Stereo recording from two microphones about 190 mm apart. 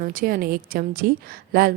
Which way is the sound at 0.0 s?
45° right (ahead or behind).